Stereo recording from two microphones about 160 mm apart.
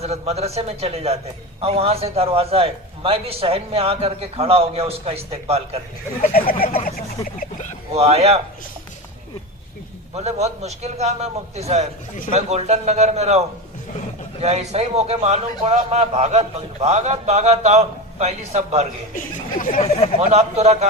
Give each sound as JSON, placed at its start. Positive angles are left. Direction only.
{"t": 0.0, "sound": "a man's voice", "side_deg": -40}
{"t": 6.3, "sound": "fowl", "side_deg": 65}
{"t": 7.9, "sound": "a man's voice", "side_deg": -40}
{"t": 10.2, "sound": "a man's voice", "side_deg": -45}
{"t": 14.4, "sound": "a man's voice", "side_deg": -45}
{"t": 19.1, "sound": "speech", "side_deg": 55}
{"t": 20.1, "sound": "a man's voice", "side_deg": -45}